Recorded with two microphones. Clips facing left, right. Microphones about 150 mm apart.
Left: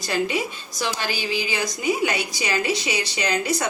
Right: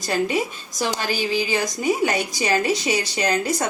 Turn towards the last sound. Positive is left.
turn(degrees=-45)  # may be behind; listen again after turning